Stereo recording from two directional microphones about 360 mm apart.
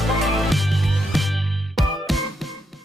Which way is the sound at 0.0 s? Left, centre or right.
Centre.